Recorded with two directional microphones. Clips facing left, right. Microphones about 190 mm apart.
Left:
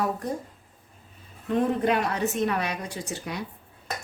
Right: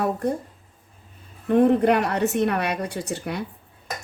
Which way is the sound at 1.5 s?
60° right (ahead or behind).